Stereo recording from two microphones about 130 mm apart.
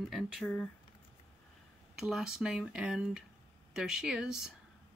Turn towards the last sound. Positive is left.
turn(degrees=-5)  # may be behind; listen again after turning